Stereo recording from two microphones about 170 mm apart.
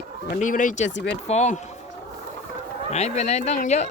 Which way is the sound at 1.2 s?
40° left (ahead or behind).